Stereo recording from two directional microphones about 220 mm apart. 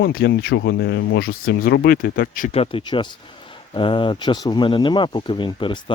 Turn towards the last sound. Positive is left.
turn(degrees=20)  # may be behind; listen again after turning